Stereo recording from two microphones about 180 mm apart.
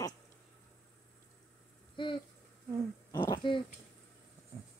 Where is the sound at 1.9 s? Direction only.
25° left (ahead or behind).